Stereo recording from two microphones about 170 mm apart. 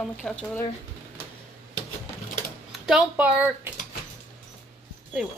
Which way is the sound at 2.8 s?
5° right (ahead or behind).